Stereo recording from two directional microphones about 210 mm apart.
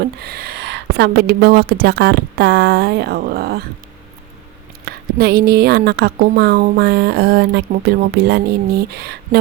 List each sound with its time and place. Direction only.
0.2 s a woman's voice: 45° right (ahead or behind)
4.9 s a woman's voice: 50° right (ahead or behind)